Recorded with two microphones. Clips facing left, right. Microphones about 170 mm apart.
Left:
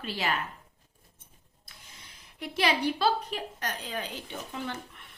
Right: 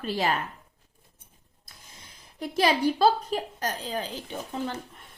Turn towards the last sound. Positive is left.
turn(degrees=-40)  # may be behind; listen again after turning